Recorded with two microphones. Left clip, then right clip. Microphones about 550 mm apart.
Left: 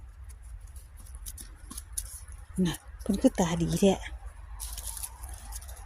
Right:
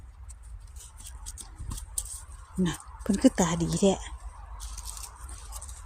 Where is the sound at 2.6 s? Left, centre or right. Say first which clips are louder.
Right 2 dB; left.